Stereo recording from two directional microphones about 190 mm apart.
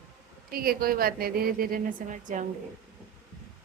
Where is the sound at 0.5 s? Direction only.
50° right (ahead or behind).